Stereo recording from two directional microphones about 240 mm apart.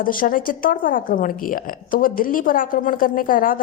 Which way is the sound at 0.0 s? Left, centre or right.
Left.